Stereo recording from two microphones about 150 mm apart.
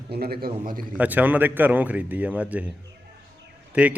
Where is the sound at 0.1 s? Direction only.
90° right.